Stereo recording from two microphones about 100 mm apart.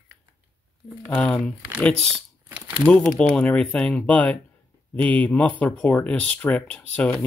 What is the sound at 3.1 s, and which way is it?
Speech, 10° left (ahead or behind).